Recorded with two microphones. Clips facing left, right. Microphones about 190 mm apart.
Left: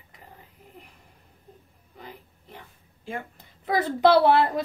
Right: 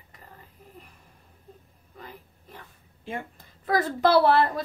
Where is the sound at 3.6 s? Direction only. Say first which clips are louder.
Left 2 dB; 15° left (ahead or behind).